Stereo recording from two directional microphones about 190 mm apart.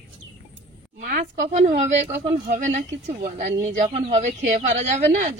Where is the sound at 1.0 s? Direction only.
45° right (ahead or behind).